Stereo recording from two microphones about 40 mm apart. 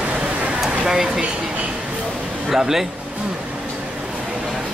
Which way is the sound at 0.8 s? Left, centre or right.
Centre.